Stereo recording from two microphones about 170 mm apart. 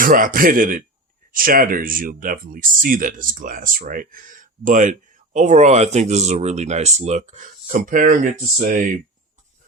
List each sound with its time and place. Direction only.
0.0 s speech: 55° right (ahead or behind)